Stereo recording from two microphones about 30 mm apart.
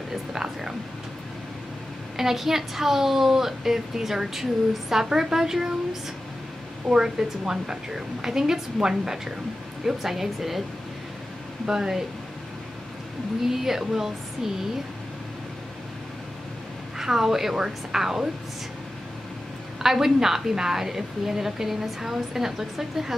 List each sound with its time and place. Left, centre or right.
0.1 s speech: centre
2.1 s a woman's voice: centre
7.2 s a woman's voice: centre
11.6 s speech: right
13.5 s a woman's voice: centre
17.0 s a woman's voice: centre
19.8 s a woman's voice: centre